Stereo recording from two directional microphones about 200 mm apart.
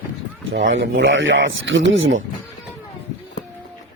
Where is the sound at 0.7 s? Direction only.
65° right (ahead or behind).